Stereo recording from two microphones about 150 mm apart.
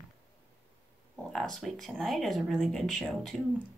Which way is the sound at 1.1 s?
Centre (ahead or behind).